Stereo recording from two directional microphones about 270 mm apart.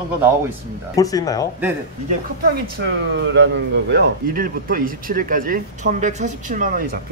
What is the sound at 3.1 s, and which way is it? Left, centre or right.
Speech, right.